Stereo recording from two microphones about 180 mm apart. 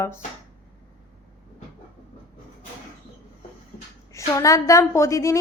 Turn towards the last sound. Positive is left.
turn(degrees=15)  # may be behind; listen again after turning